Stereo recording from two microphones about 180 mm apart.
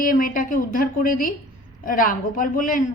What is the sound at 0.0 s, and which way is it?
A woman's voice, 50° left (ahead or behind).